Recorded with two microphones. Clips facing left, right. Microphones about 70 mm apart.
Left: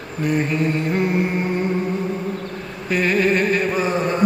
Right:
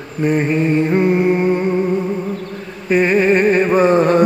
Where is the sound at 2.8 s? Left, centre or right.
Right.